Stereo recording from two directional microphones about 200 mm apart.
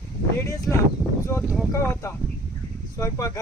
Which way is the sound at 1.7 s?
15° left (ahead or behind).